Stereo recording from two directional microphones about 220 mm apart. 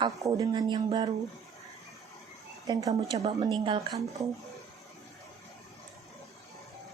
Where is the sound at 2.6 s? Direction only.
15° right (ahead or behind).